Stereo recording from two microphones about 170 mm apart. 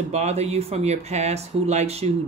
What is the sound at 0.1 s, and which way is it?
Speech, 40° right (ahead or behind).